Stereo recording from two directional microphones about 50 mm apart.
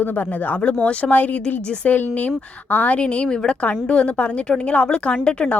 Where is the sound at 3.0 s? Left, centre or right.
Left.